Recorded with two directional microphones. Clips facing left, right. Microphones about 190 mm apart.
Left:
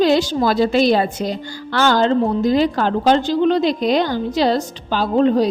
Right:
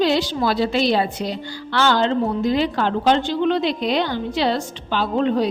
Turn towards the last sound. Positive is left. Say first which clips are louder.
# left 4 dB
turn(degrees=40)  # may be behind; listen again after turning